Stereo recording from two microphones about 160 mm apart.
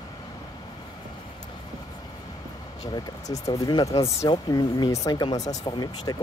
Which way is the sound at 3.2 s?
20° left (ahead or behind).